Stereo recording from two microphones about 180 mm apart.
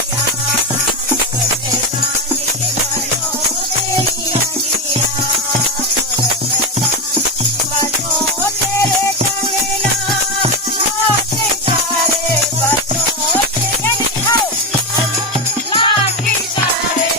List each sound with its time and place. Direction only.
15.7 s music: 30° left (ahead or behind)